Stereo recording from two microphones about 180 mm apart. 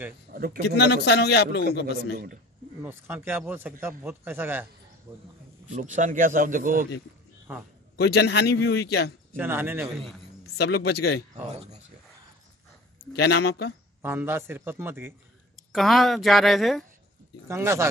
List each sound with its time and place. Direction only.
0.3 s a man's voice: 55° right (ahead or behind)
0.7 s a man's voice: 65° left (ahead or behind)
2.8 s a man's voice: 10° right (ahead or behind)
5.7 s speech: 40° right (ahead or behind)
7.9 s a man's voice: 65° left (ahead or behind)
9.4 s a man's voice: 10° right (ahead or behind)
10.4 s a man's voice: 65° left (ahead or behind)
11.5 s a sound: 35° right (ahead or behind)
13.0 s a man's voice: 65° left (ahead or behind)
14.0 s a man's voice: 15° right (ahead or behind)
15.7 s speech: centre (ahead or behind)
17.5 s a man's voice: 15° right (ahead or behind)